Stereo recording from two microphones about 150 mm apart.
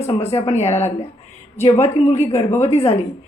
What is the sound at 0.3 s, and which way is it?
Speech, 45° left (ahead or behind).